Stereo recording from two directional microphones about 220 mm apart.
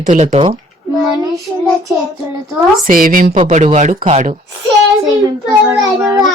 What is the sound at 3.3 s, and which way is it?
Speech, 30° right (ahead or behind).